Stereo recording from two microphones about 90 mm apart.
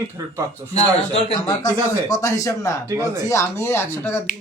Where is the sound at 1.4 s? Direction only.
45° left (ahead or behind).